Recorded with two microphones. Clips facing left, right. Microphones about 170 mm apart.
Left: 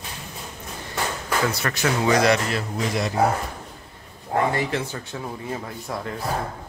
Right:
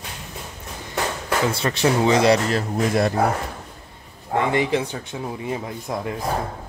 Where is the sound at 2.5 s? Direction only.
50° right (ahead or behind).